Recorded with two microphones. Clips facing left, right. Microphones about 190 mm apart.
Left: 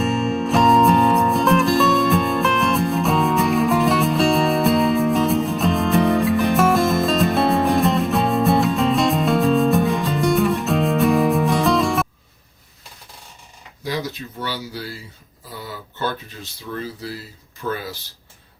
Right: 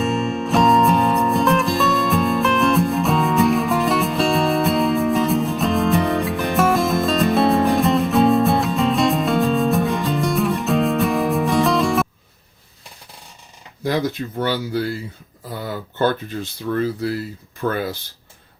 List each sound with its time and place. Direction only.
0.0 s music: centre (ahead or behind)
13.8 s speech: 55° right (ahead or behind)